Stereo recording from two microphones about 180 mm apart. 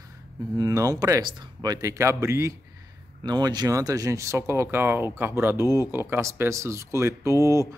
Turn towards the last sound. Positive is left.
turn(degrees=-15)  # may be behind; listen again after turning